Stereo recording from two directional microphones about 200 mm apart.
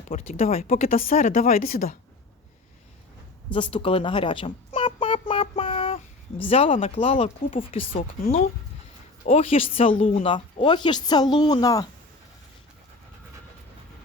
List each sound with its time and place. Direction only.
0.1 s speech: 30° left (ahead or behind)
0.7 s a woman's voice: 45° left (ahead or behind)
3.5 s a sound: 25° left (ahead or behind)
6.5 s speech: 30° left (ahead or behind)
9.2 s speech: 30° left (ahead or behind)